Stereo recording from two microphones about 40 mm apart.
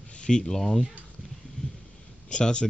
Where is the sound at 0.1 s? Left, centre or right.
Left.